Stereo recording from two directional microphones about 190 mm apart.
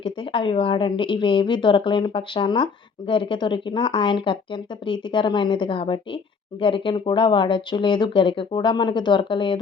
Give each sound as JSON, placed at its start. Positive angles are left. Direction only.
{"t": 0.0, "sound": "speech", "side_deg": 25}